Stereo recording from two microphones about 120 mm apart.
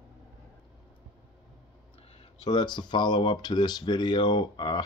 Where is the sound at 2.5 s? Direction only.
40° left (ahead or behind).